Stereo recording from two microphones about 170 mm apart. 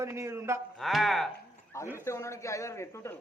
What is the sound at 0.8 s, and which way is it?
Speech, centre (ahead or behind).